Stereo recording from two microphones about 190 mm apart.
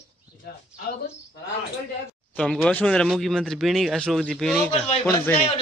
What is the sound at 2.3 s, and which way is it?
A man's voice, 5° left (ahead or behind).